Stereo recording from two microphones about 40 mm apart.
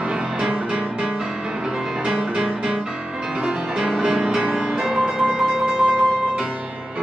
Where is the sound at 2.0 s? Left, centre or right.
Right.